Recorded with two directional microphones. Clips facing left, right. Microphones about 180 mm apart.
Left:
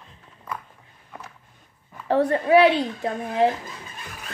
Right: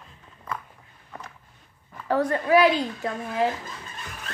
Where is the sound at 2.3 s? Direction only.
30° left (ahead or behind).